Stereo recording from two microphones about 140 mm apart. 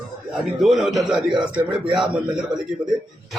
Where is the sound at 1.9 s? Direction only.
Centre (ahead or behind).